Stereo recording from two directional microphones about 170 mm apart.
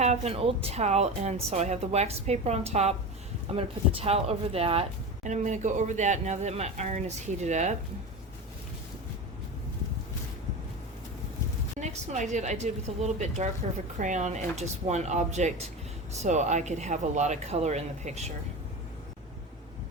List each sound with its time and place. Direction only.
0.0 s a woman's voice: 40° right (ahead or behind)
11.8 s a woman's voice: 45° right (ahead or behind)